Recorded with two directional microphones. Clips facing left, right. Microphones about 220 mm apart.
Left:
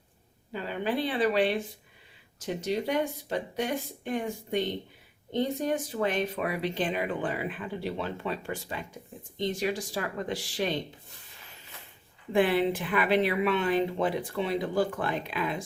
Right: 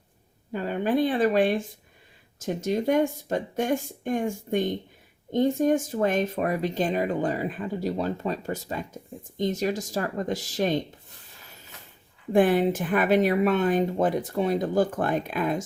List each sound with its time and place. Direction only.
0.5 s speech: 50° right (ahead or behind)
12.3 s speech: 45° right (ahead or behind)